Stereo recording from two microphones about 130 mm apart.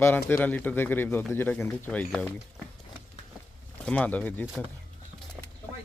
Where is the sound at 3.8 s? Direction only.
10° left (ahead or behind).